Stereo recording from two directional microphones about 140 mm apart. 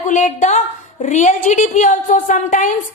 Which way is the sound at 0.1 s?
65° left (ahead or behind).